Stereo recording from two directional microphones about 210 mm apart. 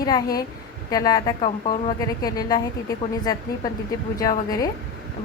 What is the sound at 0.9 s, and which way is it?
Speech, 15° left (ahead or behind).